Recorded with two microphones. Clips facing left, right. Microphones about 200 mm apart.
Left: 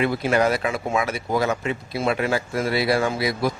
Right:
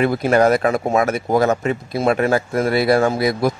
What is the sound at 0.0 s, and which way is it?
Speech, 45° right (ahead or behind).